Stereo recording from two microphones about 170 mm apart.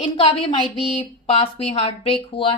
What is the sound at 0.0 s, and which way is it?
A woman's voice, 40° left (ahead or behind).